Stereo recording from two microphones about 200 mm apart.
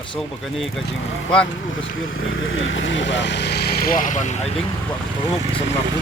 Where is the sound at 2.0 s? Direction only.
75° left (ahead or behind); by 4.4 s 35° left (ahead or behind).